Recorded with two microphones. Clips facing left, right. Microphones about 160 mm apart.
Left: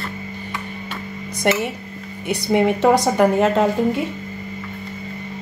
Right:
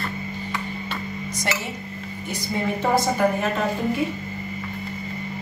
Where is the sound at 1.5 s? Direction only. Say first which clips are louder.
Left 10 dB; 55° left (ahead or behind).